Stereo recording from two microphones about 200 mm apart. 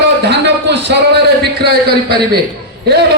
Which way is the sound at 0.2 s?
60° right (ahead or behind).